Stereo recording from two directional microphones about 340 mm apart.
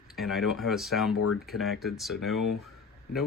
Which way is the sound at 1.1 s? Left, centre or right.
Left.